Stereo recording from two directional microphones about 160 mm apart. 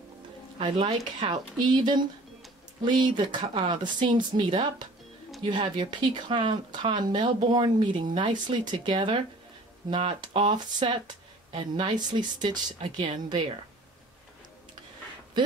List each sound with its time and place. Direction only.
0.6 s speech: 35° right (ahead or behind)